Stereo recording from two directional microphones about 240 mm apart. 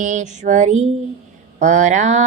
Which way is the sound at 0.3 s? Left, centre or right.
Right.